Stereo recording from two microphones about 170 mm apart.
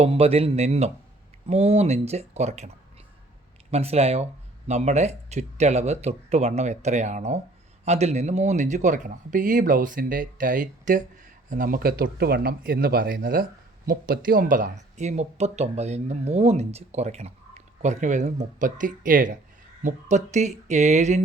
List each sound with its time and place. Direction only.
0.0 s speech: 35° right (ahead or behind)